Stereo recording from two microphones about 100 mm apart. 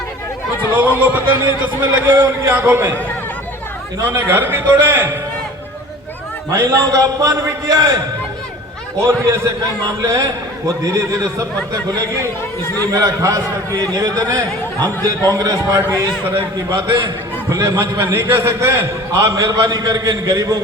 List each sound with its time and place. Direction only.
1.0 s a man's voice: 15° right (ahead or behind)
4.0 s a man's voice: 20° right (ahead or behind)
6.5 s a man's voice: 30° right (ahead or behind)
9.0 s a man's voice: 25° right (ahead or behind)
12.9 s a man's voice: 35° right (ahead or behind)
14.6 s speech: 20° left (ahead or behind)
15.0 s a man's voice: 35° right (ahead or behind)